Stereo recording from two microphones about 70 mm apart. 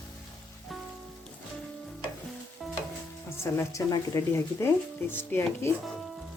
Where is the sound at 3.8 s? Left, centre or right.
Left.